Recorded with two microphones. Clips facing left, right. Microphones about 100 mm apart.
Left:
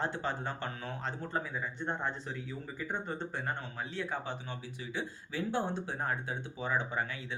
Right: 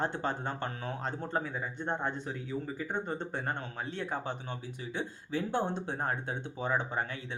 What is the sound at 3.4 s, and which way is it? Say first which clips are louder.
Speech: right 2 dB; 40° right (ahead or behind).